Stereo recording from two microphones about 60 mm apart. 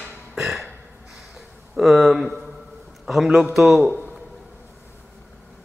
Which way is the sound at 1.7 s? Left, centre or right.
Centre.